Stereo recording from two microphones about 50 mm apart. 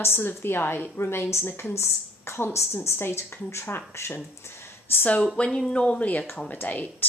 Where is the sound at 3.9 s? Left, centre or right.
Left.